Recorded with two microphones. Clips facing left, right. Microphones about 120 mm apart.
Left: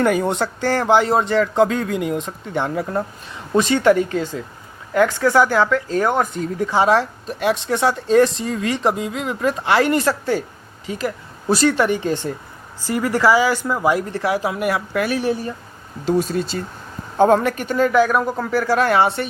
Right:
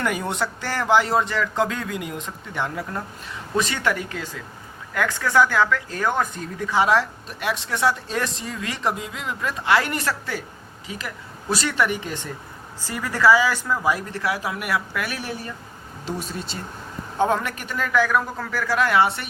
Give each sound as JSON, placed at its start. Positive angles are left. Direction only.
{"t": 0.0, "sound": "speech", "side_deg": 35}
{"t": 4.9, "sound": "speech", "side_deg": 20}
{"t": 17.2, "sound": "speech", "side_deg": 40}